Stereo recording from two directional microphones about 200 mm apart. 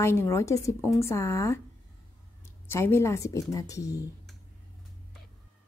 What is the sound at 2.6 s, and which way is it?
A woman's voice, 15° left (ahead or behind).